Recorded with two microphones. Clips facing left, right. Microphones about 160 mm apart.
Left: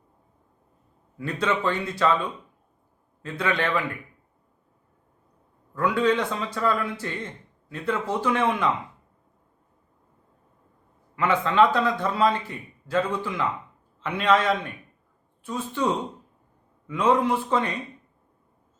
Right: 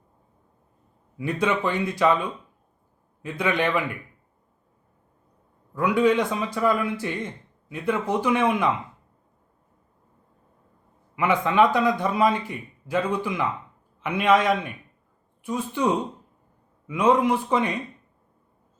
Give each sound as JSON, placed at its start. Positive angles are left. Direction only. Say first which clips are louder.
{"t": 1.2, "sound": "a man's voice", "louder": "right 1 dB", "side_deg": -15}
{"t": 3.2, "sound": "a man's voice", "louder": "right 2 dB", "side_deg": -15}
{"t": 5.7, "sound": "a man's voice", "louder": "right 2 dB", "side_deg": -15}
{"t": 11.1, "sound": "a man's voice", "louder": "right 1 dB", "side_deg": -15}